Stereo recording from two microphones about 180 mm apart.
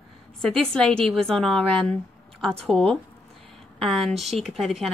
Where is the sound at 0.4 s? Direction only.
5° left (ahead or behind).